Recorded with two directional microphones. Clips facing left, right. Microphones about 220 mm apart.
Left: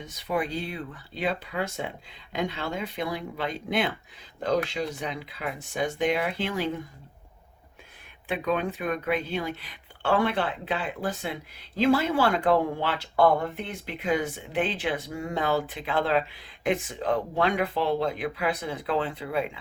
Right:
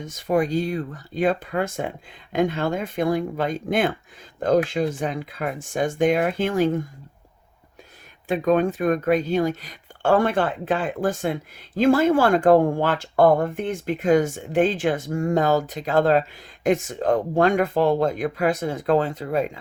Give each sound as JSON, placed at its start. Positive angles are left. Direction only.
{"t": 0.0, "sound": "speech", "side_deg": -45}
{"t": 8.3, "sound": "speech", "side_deg": -45}